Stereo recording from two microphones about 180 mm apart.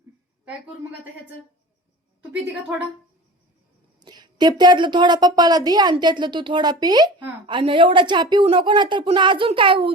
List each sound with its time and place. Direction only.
2.3 s a woman's voice: 5° right (ahead or behind)
4.0 s speech: 25° right (ahead or behind)